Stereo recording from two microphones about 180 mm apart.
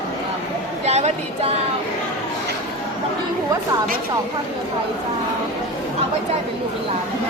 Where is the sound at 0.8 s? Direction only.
40° right (ahead or behind).